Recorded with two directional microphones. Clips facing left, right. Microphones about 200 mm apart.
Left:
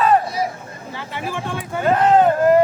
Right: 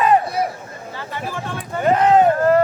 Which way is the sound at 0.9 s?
15° left (ahead or behind).